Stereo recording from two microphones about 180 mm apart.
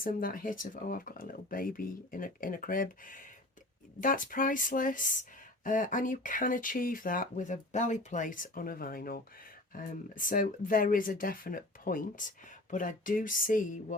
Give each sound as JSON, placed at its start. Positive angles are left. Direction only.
{"t": 0.0, "sound": "speech", "side_deg": 50}